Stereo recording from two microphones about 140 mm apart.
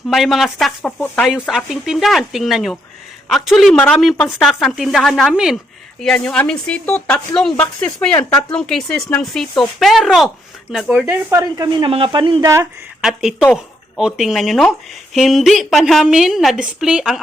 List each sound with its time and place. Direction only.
0.1 s a woman's voice: centre (ahead or behind)
1.0 s speech: 10° left (ahead or behind)
1.3 s a woman's voice: centre (ahead or behind)
11.0 s speech: 20° right (ahead or behind); by 12.4 s 35° right (ahead or behind)
12.4 s speech: 20° right (ahead or behind)
13.0 s a woman's voice: 5° right (ahead or behind)